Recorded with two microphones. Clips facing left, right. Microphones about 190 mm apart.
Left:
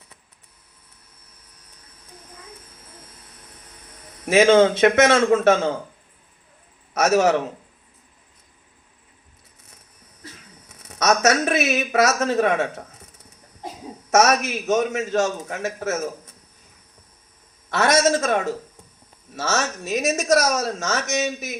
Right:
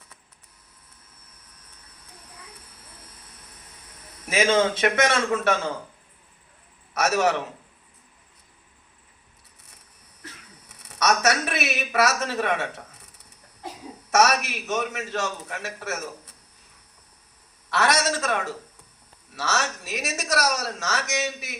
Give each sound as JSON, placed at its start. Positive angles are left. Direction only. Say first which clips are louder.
{"t": 4.3, "sound": "a man's voice", "louder": "left 7 dB", "side_deg": 50}
{"t": 6.9, "sound": "a man's voice", "louder": "left 5 dB", "side_deg": 55}
{"t": 10.7, "sound": "speech", "louder": "left 3 dB", "side_deg": 45}
{"t": 14.1, "sound": "a man's voice", "louder": "left 3 dB", "side_deg": 45}
{"t": 17.7, "sound": "a man's voice", "louder": "left 5 dB", "side_deg": 45}